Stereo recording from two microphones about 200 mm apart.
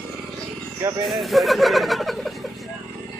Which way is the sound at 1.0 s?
Centre (ahead or behind).